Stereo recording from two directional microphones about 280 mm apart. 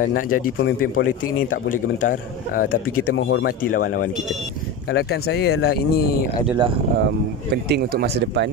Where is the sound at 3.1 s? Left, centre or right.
Left.